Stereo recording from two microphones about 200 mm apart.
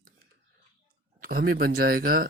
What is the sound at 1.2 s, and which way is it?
Speech, 50° right (ahead or behind).